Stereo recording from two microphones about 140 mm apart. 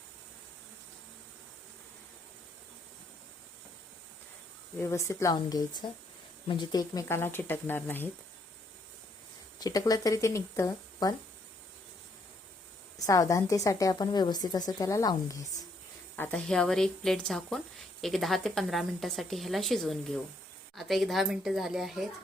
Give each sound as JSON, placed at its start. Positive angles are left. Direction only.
{"t": 4.8, "sound": "a woman's voice", "side_deg": 20}
{"t": 9.6, "sound": "a woman's voice", "side_deg": 25}
{"t": 13.1, "sound": "a woman's voice", "side_deg": 25}
{"t": 16.1, "sound": "speech", "side_deg": 10}